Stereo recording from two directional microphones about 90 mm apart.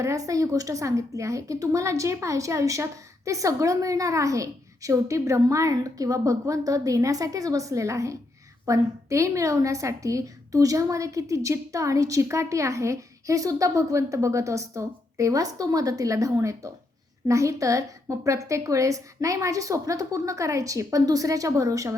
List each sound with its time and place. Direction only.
0.0 s a woman's voice: 35° right (ahead or behind)